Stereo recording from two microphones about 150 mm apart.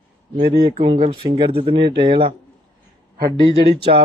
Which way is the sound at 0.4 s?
90° right.